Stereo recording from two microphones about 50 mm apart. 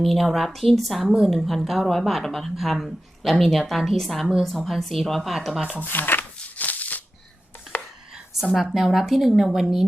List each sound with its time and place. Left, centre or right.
0.0 s a woman's voice: centre
5.8 s speech: left
6.4 s a sound: left
8.7 s a woman's voice: centre